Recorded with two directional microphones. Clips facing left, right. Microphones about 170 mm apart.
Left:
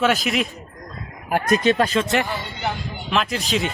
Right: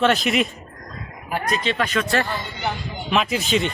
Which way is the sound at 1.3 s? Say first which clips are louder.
Left 6 dB; 45° left (ahead or behind).